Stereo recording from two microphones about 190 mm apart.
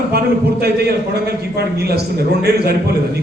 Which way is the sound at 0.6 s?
55° right (ahead or behind).